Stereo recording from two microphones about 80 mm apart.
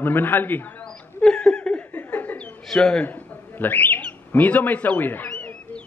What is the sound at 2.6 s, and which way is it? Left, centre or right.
Speech, centre.